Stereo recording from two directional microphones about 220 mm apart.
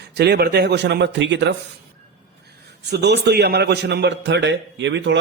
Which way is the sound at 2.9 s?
50° right (ahead or behind).